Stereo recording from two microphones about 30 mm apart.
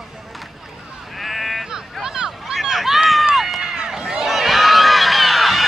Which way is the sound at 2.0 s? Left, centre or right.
Right.